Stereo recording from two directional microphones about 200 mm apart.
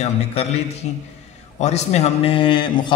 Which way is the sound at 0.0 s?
30° left (ahead or behind).